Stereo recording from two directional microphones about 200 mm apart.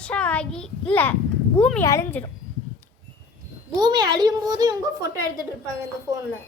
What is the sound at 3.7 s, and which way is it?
A woman's voice, 20° right (ahead or behind).